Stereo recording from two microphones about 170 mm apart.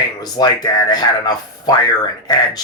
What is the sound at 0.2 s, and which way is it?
Speech, 25° left (ahead or behind).